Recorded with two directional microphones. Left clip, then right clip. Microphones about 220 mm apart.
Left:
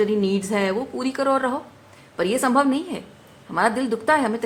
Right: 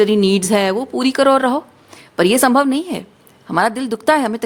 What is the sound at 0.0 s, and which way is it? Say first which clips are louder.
Speech: right 7 dB; 50° right (ahead or behind).